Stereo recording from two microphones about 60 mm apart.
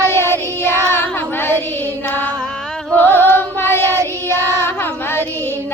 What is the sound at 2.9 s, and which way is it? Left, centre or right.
Female singing, left.